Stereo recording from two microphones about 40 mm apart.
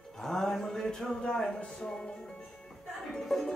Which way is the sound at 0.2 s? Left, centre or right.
Centre.